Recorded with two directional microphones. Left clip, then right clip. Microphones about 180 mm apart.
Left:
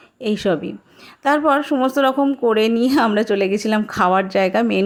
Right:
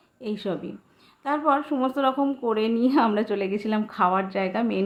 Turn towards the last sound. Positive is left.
turn(degrees=40)  # may be behind; listen again after turning